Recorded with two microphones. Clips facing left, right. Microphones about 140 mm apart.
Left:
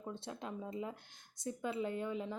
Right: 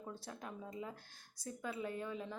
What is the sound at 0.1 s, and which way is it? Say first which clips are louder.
Speech: left 5 dB; 25° left (ahead or behind).